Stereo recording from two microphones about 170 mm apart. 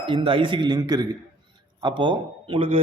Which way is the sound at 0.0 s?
30° right (ahead or behind).